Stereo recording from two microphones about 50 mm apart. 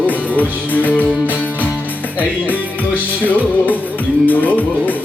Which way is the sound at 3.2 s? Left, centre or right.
Left.